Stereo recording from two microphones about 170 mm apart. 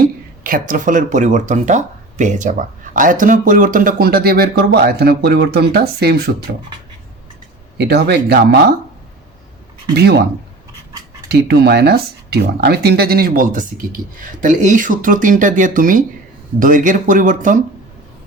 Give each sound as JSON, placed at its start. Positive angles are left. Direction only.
{"t": 0.0, "sound": "speech", "side_deg": -55}
{"t": 7.8, "sound": "speech", "side_deg": -75}
{"t": 9.9, "sound": "speech", "side_deg": -70}
{"t": 11.3, "sound": "speech", "side_deg": -70}